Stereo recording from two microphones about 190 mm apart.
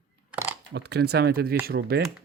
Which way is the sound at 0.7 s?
60° right (ahead or behind).